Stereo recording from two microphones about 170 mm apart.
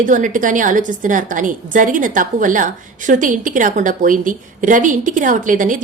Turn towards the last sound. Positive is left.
turn(degrees=-50)  # may be behind; listen again after turning